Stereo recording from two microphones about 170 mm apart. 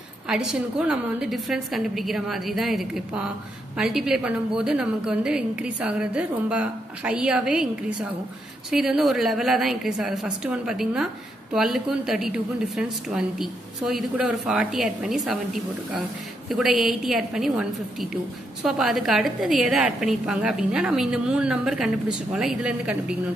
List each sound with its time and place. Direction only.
0.3 s a woman's voice: 5° right (ahead or behind)
8.6 s a woman's voice: 5° right (ahead or behind)